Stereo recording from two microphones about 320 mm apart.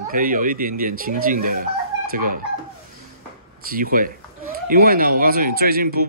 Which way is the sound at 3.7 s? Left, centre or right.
Right.